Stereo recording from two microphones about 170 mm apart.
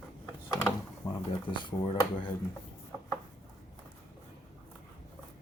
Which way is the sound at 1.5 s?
30° left (ahead or behind).